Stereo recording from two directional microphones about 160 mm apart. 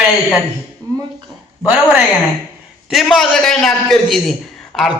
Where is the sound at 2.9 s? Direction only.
Centre (ahead or behind).